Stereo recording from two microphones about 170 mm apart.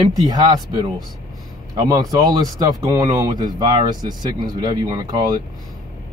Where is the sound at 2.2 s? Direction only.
20° right (ahead or behind).